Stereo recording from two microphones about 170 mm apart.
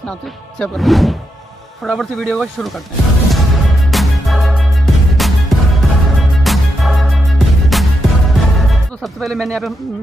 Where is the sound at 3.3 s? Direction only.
Centre (ahead or behind).